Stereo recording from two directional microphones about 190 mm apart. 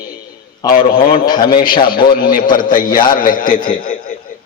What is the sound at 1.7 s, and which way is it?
Speech, 50° left (ahead or behind).